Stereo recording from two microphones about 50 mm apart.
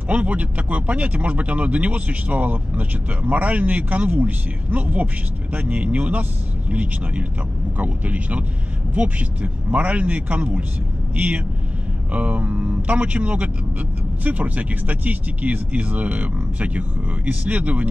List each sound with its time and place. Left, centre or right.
0.1 s speech: right